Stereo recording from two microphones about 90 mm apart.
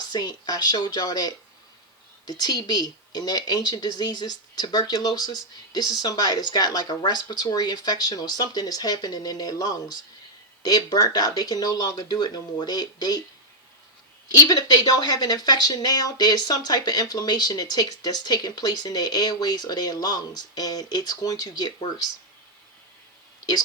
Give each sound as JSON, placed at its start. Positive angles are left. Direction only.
{"t": 0.1, "sound": "speech", "side_deg": 50}
{"t": 14.3, "sound": "speech", "side_deg": 50}